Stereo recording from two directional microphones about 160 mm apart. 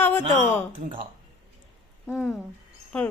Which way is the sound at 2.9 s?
5° left (ahead or behind).